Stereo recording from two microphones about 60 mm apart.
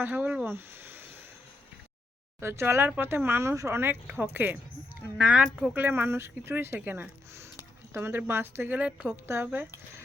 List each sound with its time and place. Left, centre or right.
0.0 s speech: right
0.4 s speech: right
2.4 s speech: right
4.1 s speech: right
5.1 s speech: centre
5.7 s speech: right
8.7 s speech: right
9.0 s speech: right